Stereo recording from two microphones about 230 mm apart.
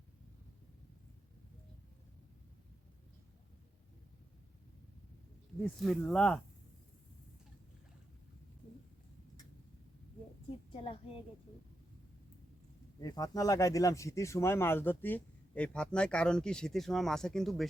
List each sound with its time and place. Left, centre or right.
5.8 s speech: centre
10.7 s a woman's voice: left
13.0 s speech: centre